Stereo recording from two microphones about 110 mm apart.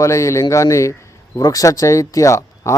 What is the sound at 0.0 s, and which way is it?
Speech, 30° left (ahead or behind).